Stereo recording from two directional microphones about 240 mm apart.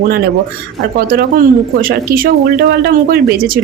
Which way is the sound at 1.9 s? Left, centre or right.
Right.